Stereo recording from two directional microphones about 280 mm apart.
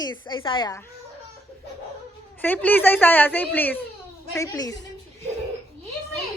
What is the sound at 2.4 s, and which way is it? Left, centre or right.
A woman's voice, centre.